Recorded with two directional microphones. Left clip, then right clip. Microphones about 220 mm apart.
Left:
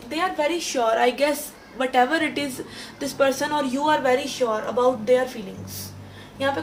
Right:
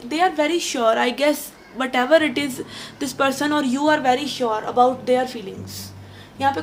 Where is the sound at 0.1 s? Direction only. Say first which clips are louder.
Right 4 dB; 45° right (ahead or behind).